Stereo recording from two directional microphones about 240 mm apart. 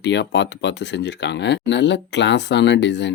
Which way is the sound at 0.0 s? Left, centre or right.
Left.